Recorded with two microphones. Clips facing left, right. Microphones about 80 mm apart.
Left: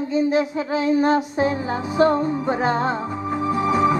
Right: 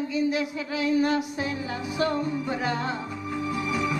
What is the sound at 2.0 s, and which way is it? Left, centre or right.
Music, left.